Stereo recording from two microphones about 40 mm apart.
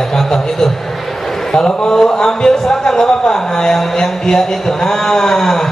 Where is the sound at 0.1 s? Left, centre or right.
Centre.